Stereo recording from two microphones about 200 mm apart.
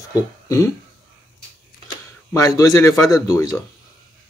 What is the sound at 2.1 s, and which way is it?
Speech, 15° left (ahead or behind).